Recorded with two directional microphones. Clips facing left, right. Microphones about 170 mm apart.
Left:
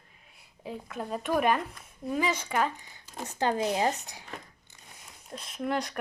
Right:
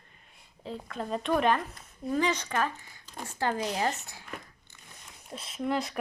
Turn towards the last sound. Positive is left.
turn(degrees=0)  # may be behind; listen again after turning